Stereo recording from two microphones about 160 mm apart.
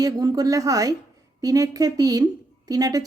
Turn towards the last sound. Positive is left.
turn(degrees=-25)  # may be behind; listen again after turning